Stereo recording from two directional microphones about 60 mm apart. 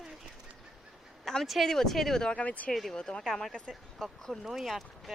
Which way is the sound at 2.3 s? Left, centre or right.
Left.